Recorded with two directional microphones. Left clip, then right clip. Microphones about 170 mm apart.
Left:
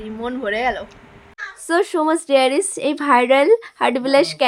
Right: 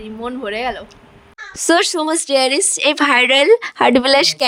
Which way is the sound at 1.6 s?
60° right (ahead or behind).